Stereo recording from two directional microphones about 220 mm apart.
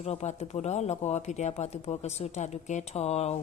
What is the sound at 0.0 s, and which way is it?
A woman's voice, 30° left (ahead or behind).